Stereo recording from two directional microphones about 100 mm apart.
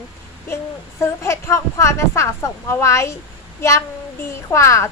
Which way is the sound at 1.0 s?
30° left (ahead or behind).